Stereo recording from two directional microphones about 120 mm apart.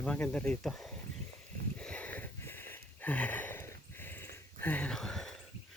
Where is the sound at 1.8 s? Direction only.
10° left (ahead or behind).